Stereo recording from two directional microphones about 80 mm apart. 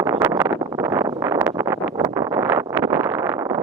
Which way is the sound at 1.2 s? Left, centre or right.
Right.